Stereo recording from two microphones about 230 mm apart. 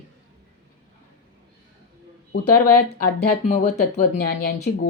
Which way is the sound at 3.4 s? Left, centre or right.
Left.